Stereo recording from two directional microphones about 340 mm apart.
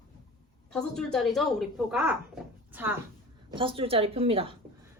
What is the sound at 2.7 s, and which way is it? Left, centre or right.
A woman's voice, centre.